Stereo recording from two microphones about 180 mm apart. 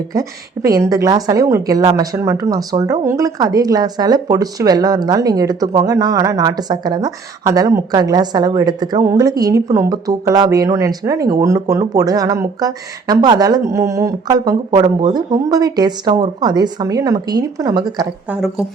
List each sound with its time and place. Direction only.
0.1 s a woman's voice: 20° right (ahead or behind)
18.3 s speech: centre (ahead or behind)